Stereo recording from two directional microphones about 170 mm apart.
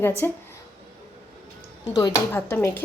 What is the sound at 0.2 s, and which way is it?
Speech, 15° left (ahead or behind).